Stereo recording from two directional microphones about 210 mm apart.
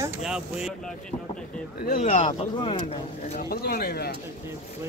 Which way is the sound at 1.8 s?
35° left (ahead or behind).